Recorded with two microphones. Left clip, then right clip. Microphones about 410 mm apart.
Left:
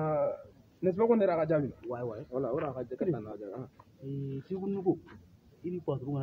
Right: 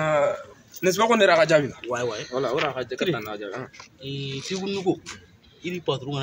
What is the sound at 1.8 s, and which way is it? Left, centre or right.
Speech, left.